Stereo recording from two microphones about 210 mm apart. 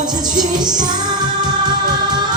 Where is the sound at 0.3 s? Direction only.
40° right (ahead or behind).